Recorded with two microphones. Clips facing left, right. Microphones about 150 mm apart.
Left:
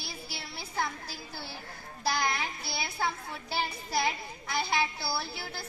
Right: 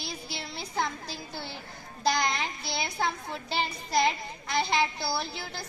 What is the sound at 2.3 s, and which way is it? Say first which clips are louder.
Speech: right 2 dB; 20° right (ahead or behind).